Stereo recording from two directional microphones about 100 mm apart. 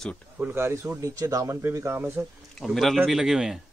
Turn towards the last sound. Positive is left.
turn(degrees=-5)  # may be behind; listen again after turning